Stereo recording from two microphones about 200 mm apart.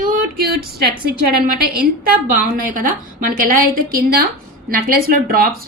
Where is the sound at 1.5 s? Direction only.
50° right (ahead or behind).